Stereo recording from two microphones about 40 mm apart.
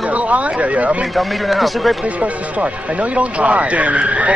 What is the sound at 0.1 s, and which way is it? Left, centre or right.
Speech, right.